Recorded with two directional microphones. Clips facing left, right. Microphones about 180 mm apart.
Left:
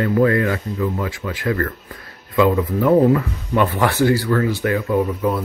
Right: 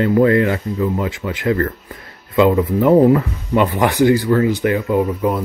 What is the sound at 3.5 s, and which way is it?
Speech, 20° right (ahead or behind).